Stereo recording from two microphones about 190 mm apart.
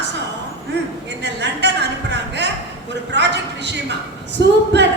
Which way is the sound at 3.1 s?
65° right (ahead or behind).